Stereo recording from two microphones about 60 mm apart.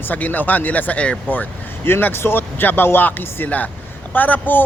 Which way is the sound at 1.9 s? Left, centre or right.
Left.